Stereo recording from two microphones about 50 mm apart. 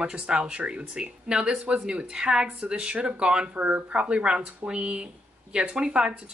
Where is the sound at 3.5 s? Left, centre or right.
Right.